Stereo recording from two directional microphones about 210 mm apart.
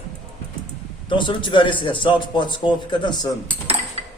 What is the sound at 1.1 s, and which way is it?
A man's voice, 25° left (ahead or behind).